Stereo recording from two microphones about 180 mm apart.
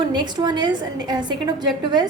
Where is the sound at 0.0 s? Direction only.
25° right (ahead or behind).